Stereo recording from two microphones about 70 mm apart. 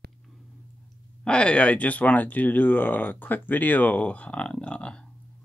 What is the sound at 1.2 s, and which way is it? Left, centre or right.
Speech, centre.